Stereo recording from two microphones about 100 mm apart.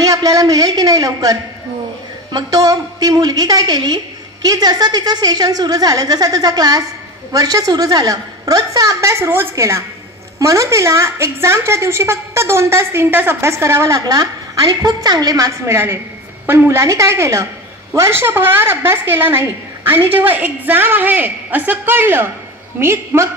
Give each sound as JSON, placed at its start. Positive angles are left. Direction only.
{"t": 0.0, "sound": "a woman's voice", "side_deg": -35}